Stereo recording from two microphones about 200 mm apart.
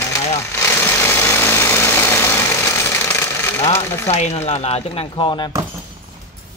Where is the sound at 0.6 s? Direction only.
10° left (ahead or behind).